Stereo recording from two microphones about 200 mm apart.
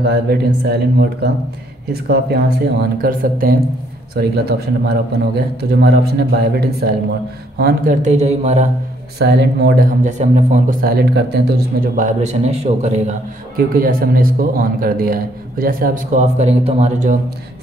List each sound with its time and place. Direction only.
0.0 s a man's voice: 55° right (ahead or behind); by 8.6 s 35° right (ahead or behind)
9.2 s speech: 55° right (ahead or behind)
10.0 s speech: 35° right (ahead or behind)
13.7 s a man's voice: 45° right (ahead or behind)